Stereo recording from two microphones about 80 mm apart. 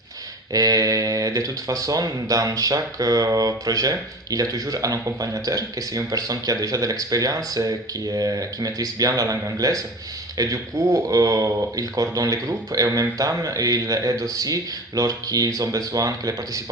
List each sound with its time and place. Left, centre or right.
0.5 s speech: right